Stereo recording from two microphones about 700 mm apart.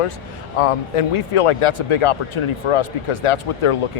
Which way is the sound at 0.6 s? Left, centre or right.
Left.